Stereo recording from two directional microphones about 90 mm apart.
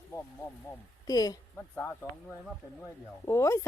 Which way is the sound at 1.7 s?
25° left (ahead or behind).